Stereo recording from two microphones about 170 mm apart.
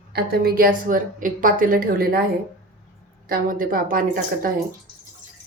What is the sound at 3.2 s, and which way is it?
A woman's voice, 55° right (ahead or behind).